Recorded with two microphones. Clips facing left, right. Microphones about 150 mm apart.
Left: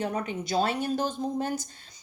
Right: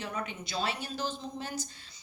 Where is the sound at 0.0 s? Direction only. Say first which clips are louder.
Left 7 dB; 40° left (ahead or behind).